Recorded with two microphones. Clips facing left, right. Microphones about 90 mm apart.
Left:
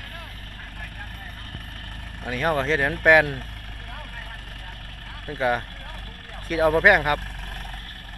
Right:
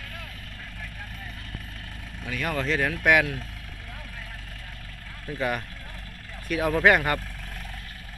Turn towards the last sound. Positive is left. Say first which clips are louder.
# left 3 dB
turn(degrees=20)  # may be behind; listen again after turning